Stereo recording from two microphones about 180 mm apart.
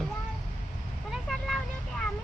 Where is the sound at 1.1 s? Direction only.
Centre (ahead or behind).